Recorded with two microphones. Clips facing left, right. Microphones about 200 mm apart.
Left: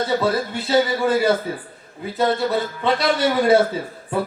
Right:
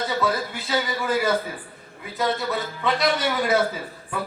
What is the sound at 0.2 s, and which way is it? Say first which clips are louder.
Speech: left 4 dB; 30° left (ahead or behind).